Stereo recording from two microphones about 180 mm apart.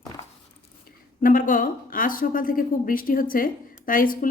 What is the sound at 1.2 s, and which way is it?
A woman's voice, 50° left (ahead or behind).